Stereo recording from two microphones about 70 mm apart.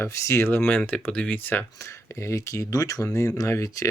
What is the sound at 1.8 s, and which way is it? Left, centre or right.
Speech, left.